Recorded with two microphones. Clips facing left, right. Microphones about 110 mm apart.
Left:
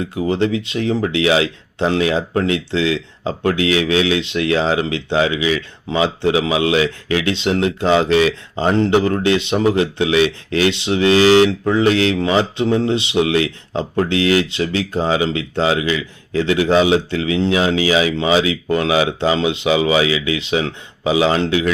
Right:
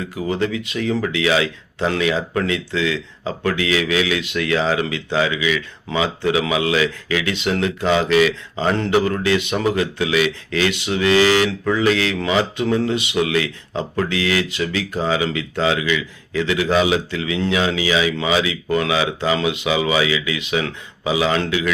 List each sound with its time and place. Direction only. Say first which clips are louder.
0.1 s speech: left 3 dB; 30° left (ahead or behind)